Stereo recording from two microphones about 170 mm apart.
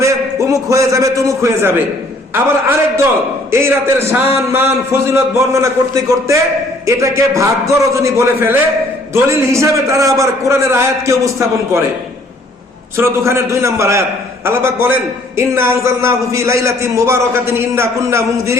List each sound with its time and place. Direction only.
0.0 s a man's voice: 20° right (ahead or behind)
13.0 s a man's voice: 15° right (ahead or behind)